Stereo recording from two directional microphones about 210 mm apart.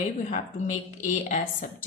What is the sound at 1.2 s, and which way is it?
Speech, 35° left (ahead or behind).